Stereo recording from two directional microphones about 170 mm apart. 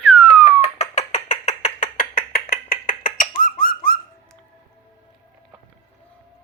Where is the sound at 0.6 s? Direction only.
40° left (ahead or behind).